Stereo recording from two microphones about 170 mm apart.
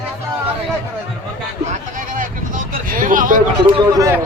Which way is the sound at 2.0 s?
55° right (ahead or behind).